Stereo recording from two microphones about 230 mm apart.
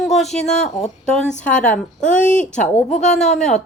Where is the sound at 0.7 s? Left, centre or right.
Centre.